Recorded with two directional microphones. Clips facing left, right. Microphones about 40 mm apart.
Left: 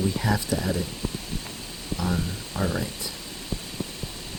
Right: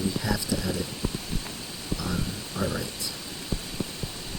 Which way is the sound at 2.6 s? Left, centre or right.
Left.